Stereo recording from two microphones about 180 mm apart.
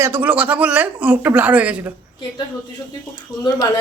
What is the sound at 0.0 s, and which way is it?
Speech, 10° right (ahead or behind).